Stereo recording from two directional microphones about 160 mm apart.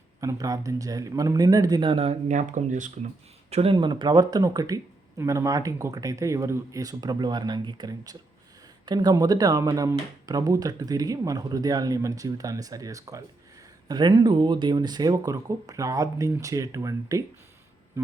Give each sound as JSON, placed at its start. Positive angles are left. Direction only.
{"t": 0.2, "sound": "speech", "side_deg": -20}
{"t": 3.5, "sound": "speech", "side_deg": -35}
{"t": 18.0, "sound": "music", "side_deg": -15}